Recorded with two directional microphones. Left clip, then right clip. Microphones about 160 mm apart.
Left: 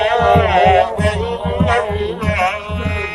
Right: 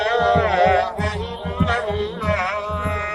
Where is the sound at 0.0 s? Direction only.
30° right (ahead or behind).